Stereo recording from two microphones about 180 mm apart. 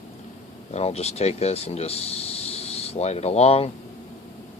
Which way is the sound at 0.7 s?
35° left (ahead or behind).